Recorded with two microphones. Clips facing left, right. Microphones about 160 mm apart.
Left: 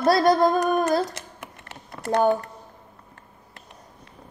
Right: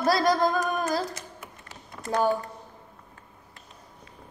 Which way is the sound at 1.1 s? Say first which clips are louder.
Left 2 dB; 65° left (ahead or behind).